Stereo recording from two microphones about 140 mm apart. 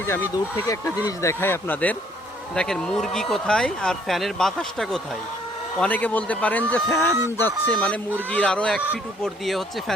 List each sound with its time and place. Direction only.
0.1 s speech: 20° left (ahead or behind); by 9.9 s centre (ahead or behind)